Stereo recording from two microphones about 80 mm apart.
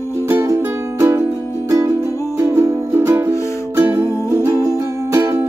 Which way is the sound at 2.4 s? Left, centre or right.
Right.